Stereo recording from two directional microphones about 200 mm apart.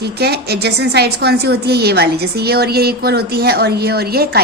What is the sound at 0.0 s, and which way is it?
A woman's voice, 55° right (ahead or behind).